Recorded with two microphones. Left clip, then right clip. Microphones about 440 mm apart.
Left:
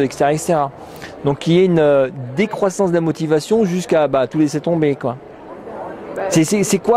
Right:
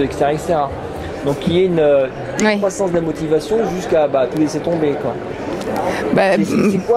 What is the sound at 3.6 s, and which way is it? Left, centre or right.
Speech, left.